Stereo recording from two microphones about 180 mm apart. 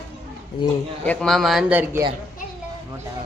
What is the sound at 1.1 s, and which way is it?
Speech, centre (ahead or behind).